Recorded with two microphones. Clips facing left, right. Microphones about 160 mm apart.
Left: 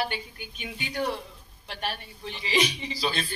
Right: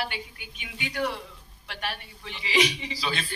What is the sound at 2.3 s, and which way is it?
Speech, 40° left (ahead or behind).